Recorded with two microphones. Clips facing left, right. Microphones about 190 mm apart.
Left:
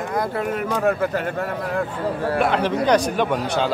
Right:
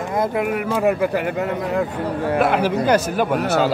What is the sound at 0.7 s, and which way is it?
Speech, 10° right (ahead or behind).